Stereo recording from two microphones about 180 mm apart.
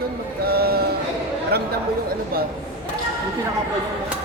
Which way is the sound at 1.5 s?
60° right (ahead or behind).